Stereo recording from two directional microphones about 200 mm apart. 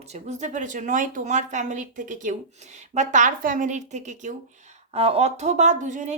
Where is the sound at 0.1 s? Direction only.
35° right (ahead or behind).